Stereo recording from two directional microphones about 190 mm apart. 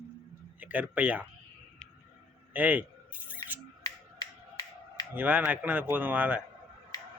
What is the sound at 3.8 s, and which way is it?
Finger snapping, 20° left (ahead or behind).